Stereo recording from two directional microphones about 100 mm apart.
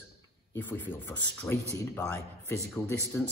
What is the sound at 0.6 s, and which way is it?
Speech, 20° left (ahead or behind).